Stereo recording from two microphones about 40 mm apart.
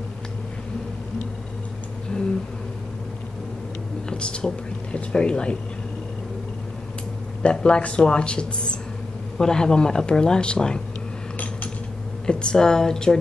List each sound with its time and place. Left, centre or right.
2.1 s a sound: left
4.1 s speech: left
7.4 s a woman's voice: left
12.3 s speech: left